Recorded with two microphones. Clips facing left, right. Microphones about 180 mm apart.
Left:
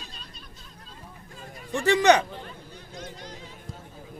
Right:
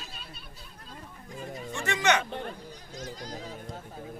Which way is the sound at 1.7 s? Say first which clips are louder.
Left 8 dB; 35° left (ahead or behind).